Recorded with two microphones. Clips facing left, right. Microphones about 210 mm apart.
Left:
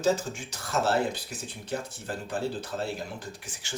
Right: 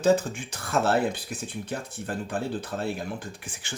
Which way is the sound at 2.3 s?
55° right (ahead or behind).